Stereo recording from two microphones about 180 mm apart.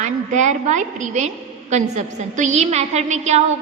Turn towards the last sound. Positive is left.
turn(degrees=-40)  # may be behind; listen again after turning